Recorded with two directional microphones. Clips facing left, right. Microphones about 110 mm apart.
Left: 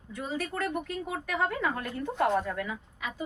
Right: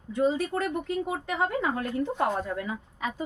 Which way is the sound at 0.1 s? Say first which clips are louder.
Right 9 dB; 25° right (ahead or behind).